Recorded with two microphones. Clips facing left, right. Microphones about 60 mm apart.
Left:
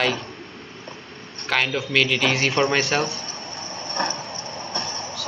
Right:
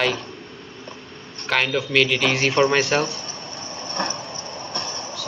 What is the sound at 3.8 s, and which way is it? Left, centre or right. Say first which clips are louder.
Train: left 1 dB; left.